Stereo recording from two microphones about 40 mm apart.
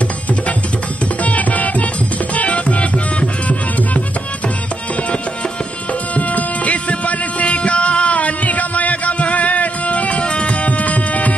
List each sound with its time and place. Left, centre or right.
1.2 s music: left
6.1 s music: left